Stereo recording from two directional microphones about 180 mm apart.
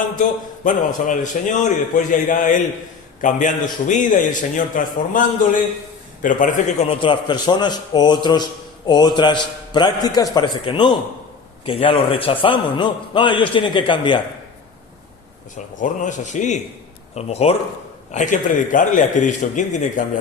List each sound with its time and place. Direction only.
0.2 s a man's voice: 45° left (ahead or behind)
6.2 s a man's voice: 45° left (ahead or behind)
7.1 s a man's voice: 25° left (ahead or behind)
15.5 s a man's voice: 45° left (ahead or behind)